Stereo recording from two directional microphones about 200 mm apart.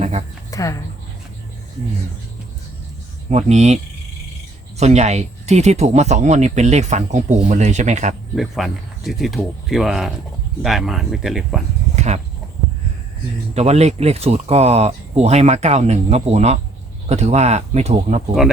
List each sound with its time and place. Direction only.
0.0 s a sound: 35° right (ahead or behind)
0.5 s speech: 15° left (ahead or behind)
3.2 s speech: 35° right (ahead or behind)
4.8 s speech: 35° right (ahead or behind)
8.4 s speech: centre (ahead or behind)
11.9 s a sound: 35° right (ahead or behind)
13.5 s speech: 30° right (ahead or behind)